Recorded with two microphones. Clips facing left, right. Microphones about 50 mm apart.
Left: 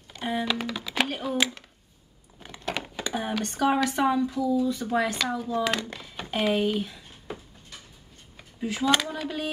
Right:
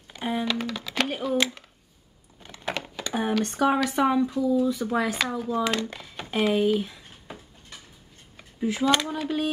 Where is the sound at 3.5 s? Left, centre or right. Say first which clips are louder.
Even; centre.